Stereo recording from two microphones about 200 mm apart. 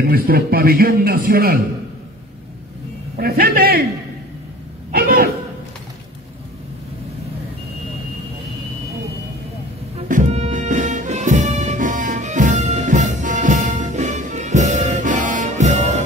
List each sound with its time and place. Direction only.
0.1 s a man's voice: 50° right (ahead or behind)
3.2 s a man's voice: 50° right (ahead or behind)
4.9 s a man's voice: 50° right (ahead or behind)
9.9 s music: 40° right (ahead or behind)